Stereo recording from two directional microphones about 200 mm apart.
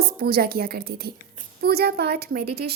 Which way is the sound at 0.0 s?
50° right (ahead or behind).